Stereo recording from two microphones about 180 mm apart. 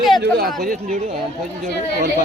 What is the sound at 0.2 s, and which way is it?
Speech, 65° right (ahead or behind).